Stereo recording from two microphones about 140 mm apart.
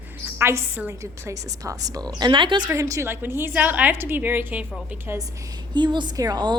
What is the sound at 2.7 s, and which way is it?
A woman's voice, 20° right (ahead or behind).